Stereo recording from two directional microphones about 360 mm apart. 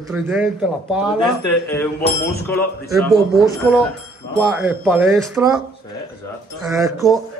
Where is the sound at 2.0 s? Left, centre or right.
Left.